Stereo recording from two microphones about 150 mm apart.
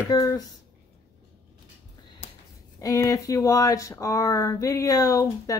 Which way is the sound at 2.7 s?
20° left (ahead or behind).